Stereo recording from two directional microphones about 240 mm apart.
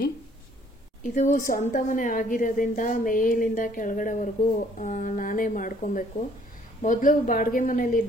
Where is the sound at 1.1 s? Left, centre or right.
Left.